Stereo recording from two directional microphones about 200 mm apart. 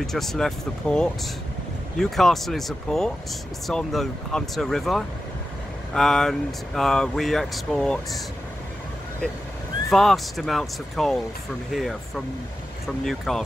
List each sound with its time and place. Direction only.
0.0 s speech: centre (ahead or behind)
9.8 s speech: centre (ahead or behind)